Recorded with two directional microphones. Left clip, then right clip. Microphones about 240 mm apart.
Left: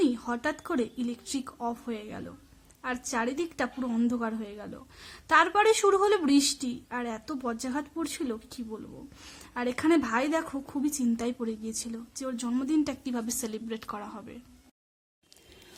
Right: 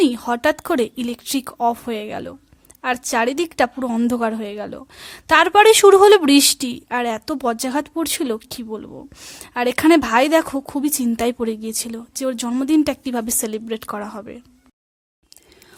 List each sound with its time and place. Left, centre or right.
0.0 s a woman's voice: right